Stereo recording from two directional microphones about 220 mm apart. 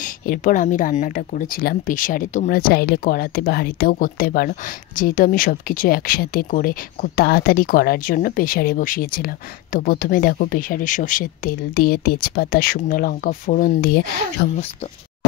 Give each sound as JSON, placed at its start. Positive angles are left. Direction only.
{"t": 0.0, "sound": "speech", "side_deg": 35}
{"t": 14.5, "sound": "speech", "side_deg": 30}